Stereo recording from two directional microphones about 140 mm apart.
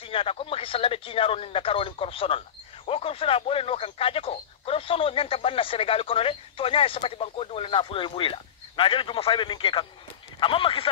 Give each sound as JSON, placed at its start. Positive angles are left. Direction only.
{"t": 0.0, "sound": "speech", "side_deg": 40}